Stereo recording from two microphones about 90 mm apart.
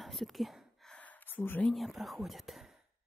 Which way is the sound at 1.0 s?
20° left (ahead or behind).